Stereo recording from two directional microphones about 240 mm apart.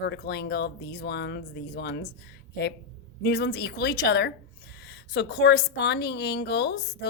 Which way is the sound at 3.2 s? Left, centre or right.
Left.